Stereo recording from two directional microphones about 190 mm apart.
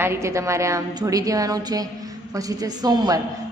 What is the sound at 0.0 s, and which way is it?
A woman's voice, 15° right (ahead or behind).